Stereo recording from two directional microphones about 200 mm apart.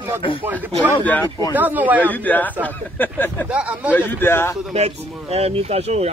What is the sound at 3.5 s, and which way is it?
Speech, 5° right (ahead or behind).